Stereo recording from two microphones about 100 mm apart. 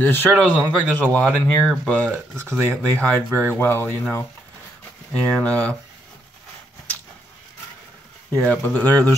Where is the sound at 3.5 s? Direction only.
20° left (ahead or behind).